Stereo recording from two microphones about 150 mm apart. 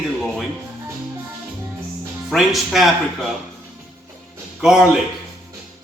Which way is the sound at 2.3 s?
Centre (ahead or behind).